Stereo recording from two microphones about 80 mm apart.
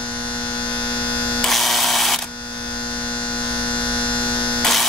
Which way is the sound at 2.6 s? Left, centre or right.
Left.